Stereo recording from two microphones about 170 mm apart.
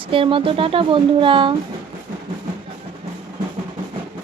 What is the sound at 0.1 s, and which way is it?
Speech, 30° right (ahead or behind).